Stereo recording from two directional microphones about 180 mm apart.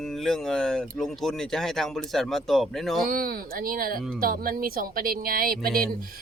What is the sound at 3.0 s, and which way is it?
A woman's voice, 55° right (ahead or behind).